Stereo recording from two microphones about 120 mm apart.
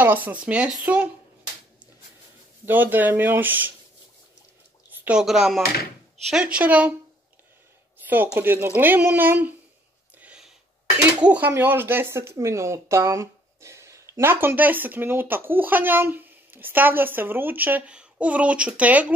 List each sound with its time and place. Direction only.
0.0 s speech: 15° right (ahead or behind)
2.6 s speech: 15° right (ahead or behind)
4.9 s speech: 10° right (ahead or behind)
8.0 s a sound: 15° right (ahead or behind)
8.4 s speech: 20° right (ahead or behind)
10.1 s a sound: 10° right (ahead or behind)
11.2 s speech: 15° right (ahead or behind)